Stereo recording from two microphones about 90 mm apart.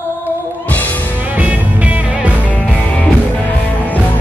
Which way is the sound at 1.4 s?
15° right (ahead or behind).